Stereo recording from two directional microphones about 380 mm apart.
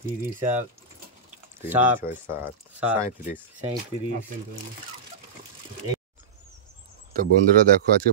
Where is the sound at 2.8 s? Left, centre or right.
Centre.